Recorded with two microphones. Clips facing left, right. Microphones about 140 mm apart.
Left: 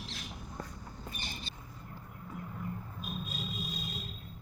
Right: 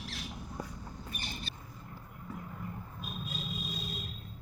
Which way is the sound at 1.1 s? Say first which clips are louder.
Even; 25° left (ahead or behind).